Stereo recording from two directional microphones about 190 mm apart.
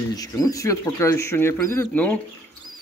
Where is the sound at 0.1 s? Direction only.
20° left (ahead or behind).